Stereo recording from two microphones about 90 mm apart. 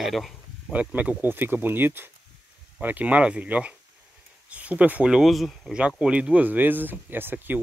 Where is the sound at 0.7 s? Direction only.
15° right (ahead or behind); by 5.7 s centre (ahead or behind).